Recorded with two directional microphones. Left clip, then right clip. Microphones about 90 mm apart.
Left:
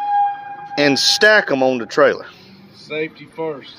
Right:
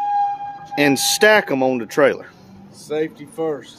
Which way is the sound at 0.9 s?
20° right (ahead or behind).